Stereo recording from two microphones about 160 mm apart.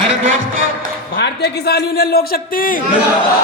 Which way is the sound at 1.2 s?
85° left.